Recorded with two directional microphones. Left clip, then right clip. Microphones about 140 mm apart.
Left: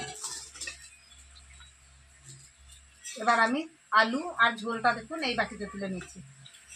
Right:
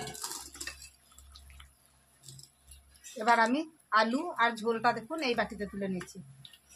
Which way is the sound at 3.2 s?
45° right (ahead or behind).